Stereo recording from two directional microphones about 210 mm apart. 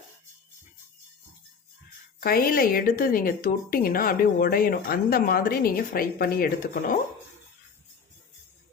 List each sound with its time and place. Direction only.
2.2 s a woman's voice: 45° left (ahead or behind)